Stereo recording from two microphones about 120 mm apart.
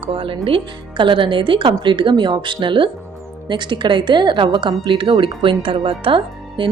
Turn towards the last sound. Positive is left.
turn(degrees=-45)  # may be behind; listen again after turning